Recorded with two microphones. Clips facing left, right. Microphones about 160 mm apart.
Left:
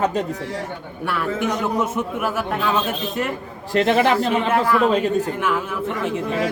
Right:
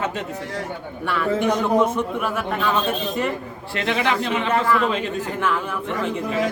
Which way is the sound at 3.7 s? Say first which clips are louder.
Left 6 dB; 45° left (ahead or behind).